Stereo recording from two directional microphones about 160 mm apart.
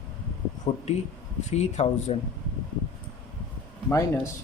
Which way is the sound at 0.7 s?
45° left (ahead or behind).